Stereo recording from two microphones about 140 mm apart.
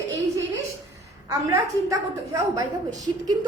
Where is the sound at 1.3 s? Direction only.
25° right (ahead or behind).